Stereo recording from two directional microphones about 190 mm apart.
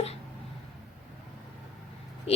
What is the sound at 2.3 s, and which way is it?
Speech, 30° left (ahead or behind).